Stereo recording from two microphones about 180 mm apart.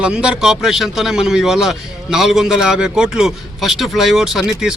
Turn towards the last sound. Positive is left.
turn(degrees=-5)  # may be behind; listen again after turning